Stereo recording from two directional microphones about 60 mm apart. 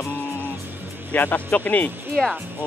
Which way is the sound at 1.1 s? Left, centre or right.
Left.